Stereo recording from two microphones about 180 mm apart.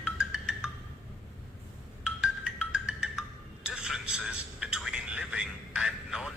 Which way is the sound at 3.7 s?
5° right (ahead or behind).